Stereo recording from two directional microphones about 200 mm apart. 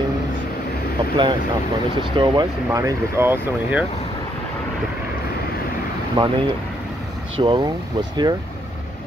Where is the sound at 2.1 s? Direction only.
25° right (ahead or behind).